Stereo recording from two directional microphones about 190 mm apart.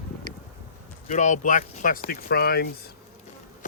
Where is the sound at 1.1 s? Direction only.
40° left (ahead or behind); by 2.7 s 55° left (ahead or behind).